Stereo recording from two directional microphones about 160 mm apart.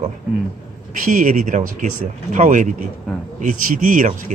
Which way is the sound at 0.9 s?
55° right (ahead or behind).